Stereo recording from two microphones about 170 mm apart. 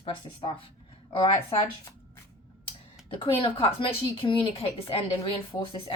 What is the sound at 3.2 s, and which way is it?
Speech, 30° left (ahead or behind).